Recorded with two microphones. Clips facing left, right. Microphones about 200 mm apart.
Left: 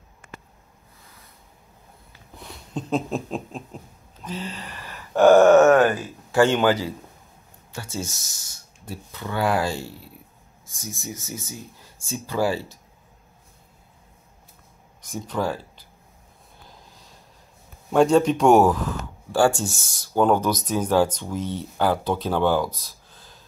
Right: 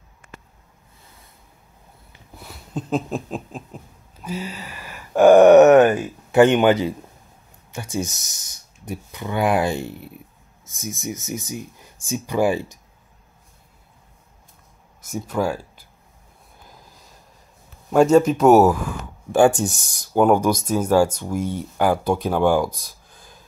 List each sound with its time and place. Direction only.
2.3 s a sound: 5° right (ahead or behind); by 6.9 s 20° right (ahead or behind)
7.7 s speech: 20° right (ahead or behind)
15.0 s speech: 5° right (ahead or behind)
17.9 s speech: 5° right (ahead or behind)